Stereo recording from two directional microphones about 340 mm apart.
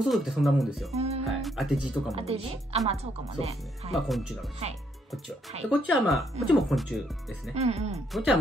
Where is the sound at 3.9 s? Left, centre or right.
Centre.